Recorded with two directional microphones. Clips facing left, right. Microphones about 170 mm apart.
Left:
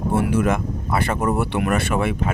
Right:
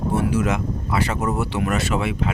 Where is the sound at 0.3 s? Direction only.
55° left (ahead or behind).